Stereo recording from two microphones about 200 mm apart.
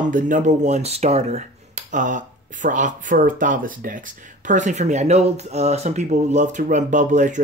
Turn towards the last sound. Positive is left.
turn(degrees=-40)  # may be behind; listen again after turning